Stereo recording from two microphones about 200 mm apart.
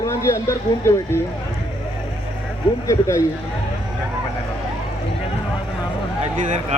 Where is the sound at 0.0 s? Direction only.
15° left (ahead or behind).